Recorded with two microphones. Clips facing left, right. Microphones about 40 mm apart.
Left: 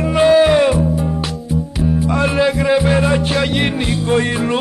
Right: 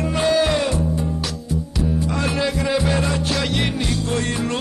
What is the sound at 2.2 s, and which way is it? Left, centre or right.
Music, centre.